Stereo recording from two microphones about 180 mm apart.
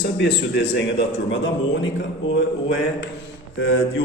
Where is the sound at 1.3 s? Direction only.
90° left.